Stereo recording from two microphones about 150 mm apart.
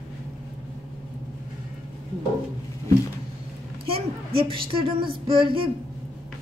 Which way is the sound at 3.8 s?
40° right (ahead or behind).